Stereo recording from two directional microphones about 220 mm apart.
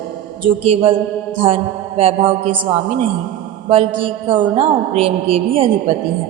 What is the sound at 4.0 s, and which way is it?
A woman's voice, 25° right (ahead or behind).